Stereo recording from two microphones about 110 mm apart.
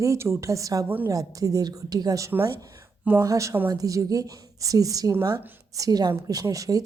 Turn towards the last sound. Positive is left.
turn(degrees=-30)  # may be behind; listen again after turning